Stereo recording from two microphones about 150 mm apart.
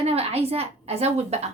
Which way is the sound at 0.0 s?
40° right (ahead or behind).